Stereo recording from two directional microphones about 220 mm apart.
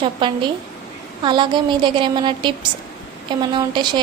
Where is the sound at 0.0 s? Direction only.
20° right (ahead or behind).